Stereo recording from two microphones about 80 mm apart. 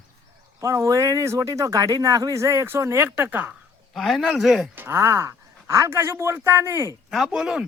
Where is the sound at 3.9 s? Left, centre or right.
Centre.